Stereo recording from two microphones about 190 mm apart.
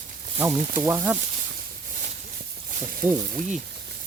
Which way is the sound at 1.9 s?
45° right (ahead or behind).